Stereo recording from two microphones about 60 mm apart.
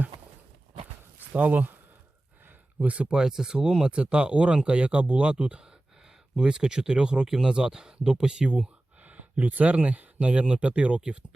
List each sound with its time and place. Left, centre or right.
1.3 s speech: right
9.0 s speech: right